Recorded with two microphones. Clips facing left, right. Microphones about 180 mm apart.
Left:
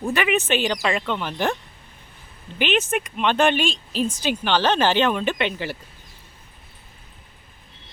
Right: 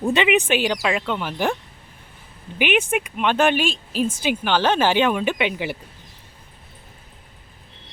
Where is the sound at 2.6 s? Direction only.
10° right (ahead or behind).